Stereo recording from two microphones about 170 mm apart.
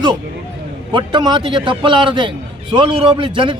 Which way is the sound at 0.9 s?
30° right (ahead or behind).